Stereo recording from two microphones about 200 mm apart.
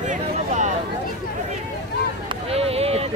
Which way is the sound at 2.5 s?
30° right (ahead or behind).